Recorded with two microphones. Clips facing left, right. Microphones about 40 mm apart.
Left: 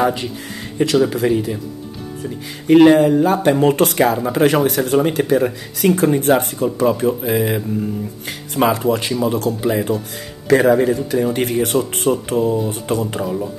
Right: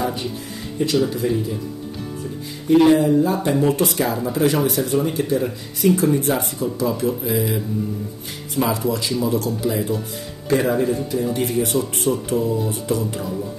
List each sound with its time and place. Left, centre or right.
0.0 s speech: left
2.7 s speech: left
4.7 s speech: left
5.9 s speech: left
8.3 s speech: left
8.7 s speech: left
10.5 s speech: left
11.2 s speech: left